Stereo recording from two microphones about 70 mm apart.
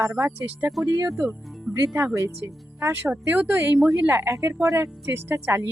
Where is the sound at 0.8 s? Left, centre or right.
Right.